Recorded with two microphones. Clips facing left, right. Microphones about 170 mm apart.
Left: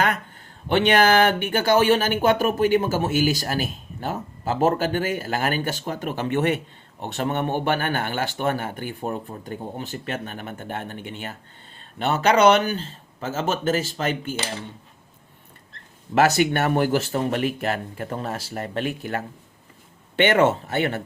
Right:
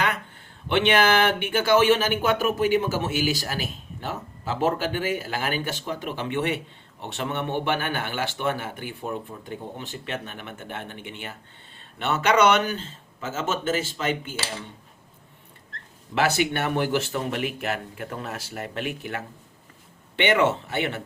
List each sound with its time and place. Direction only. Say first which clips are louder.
0.7 s speech: left 3 dB; 40° left (ahead or behind)
16.1 s speech: left 5 dB; 45° left (ahead or behind)